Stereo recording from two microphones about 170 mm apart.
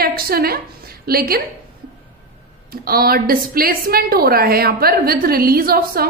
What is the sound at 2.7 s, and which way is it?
A woman's voice, 60° right (ahead or behind).